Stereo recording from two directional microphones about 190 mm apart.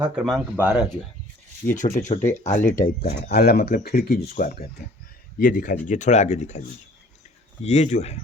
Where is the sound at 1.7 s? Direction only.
40° left (ahead or behind).